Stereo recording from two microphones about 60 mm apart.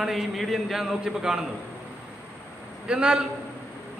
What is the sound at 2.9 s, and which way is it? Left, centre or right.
Speech, centre.